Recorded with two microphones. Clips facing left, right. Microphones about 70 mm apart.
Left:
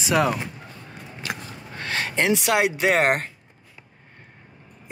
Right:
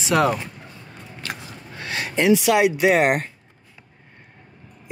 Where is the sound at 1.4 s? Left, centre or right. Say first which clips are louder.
Left 1 dB; left.